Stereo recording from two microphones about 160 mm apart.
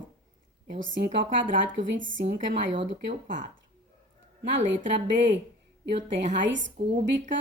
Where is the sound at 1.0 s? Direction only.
90° right.